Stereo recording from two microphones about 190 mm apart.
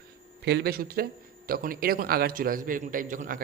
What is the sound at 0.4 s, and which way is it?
A man's voice, 60° right (ahead or behind).